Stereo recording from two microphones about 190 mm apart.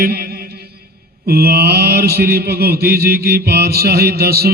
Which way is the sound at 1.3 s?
55° right (ahead or behind).